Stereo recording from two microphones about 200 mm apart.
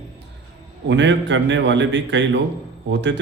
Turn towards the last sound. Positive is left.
turn(degrees=-65)  # may be behind; listen again after turning